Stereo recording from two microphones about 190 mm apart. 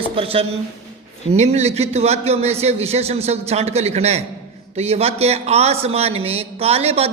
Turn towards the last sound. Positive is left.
turn(degrees=-30)  # may be behind; listen again after turning